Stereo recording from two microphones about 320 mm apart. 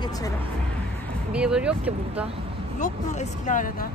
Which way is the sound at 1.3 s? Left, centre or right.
Centre.